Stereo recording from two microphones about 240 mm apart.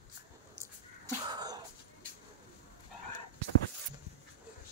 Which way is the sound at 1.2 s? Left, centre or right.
Centre.